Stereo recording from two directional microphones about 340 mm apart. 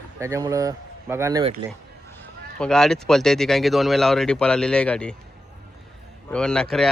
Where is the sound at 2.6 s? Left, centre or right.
Centre.